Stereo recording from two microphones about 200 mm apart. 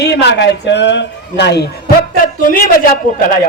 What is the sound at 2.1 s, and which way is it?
Speech, 45° left (ahead or behind).